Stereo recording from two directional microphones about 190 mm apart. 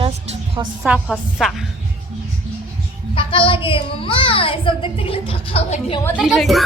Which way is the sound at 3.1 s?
25° left (ahead or behind).